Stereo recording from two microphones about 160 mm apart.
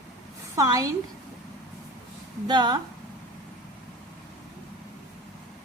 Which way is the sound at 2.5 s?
25° right (ahead or behind).